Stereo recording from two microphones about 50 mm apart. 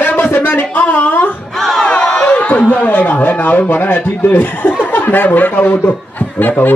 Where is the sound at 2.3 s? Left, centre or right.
Left.